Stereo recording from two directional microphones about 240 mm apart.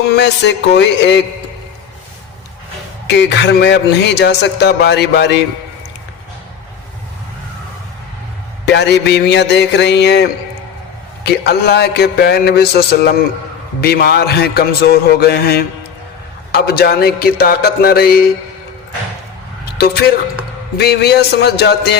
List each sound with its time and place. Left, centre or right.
0.1 s a man's voice: left
3.1 s a man's voice: left
8.6 s a man's voice: left
19.8 s a man's voice: left